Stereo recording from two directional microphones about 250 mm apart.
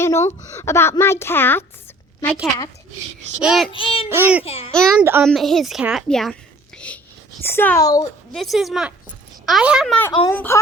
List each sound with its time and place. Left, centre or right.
0.0 s a woman's voice: centre
3.4 s a woman's voice: centre
3.7 s child singing: left
4.1 s speech: centre
4.4 s child singing: left
4.7 s a woman's voice: centre
6.7 s whispering: centre
7.4 s a woman's voice: centre
8.3 s a woman's voice: centre
10.1 s child singing: centre
10.3 s a woman's voice: centre